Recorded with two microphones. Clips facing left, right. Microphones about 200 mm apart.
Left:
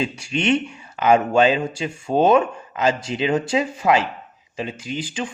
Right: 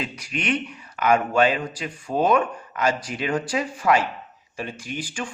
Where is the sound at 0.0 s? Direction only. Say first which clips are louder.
Left 6 dB; 25° left (ahead or behind).